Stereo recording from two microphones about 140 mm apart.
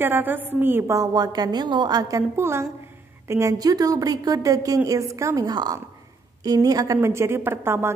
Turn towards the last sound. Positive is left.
turn(degrees=-15)  # may be behind; listen again after turning